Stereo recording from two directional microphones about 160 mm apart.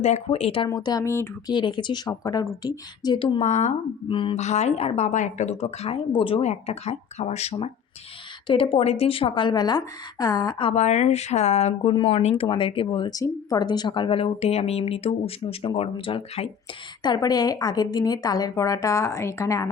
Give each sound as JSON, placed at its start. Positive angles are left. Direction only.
{"t": 0.0, "sound": "a woman's voice", "side_deg": 40}
{"t": 1.5, "sound": "a woman's voice", "side_deg": 30}
{"t": 3.4, "sound": "speech", "side_deg": 45}
{"t": 4.1, "sound": "speech", "side_deg": 30}
{"t": 4.4, "sound": "speech", "side_deg": 45}
{"t": 6.1, "sound": "speech", "side_deg": 30}
{"t": 10.7, "sound": "speech", "side_deg": 45}
{"t": 17.0, "sound": "a woman's voice", "side_deg": 25}